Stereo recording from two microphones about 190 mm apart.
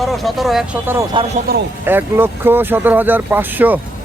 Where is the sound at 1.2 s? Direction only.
25° right (ahead or behind).